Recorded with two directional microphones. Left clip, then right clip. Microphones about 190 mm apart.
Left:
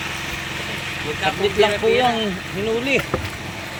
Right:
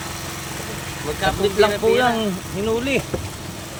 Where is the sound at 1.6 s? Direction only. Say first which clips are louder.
Even; 60° right (ahead or behind).